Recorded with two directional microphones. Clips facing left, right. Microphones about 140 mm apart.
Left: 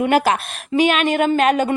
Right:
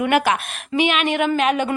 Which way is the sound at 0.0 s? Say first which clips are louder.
Left 2 dB; 35° left (ahead or behind).